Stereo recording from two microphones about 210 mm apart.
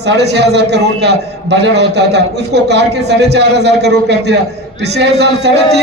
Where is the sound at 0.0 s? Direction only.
55° right (ahead or behind).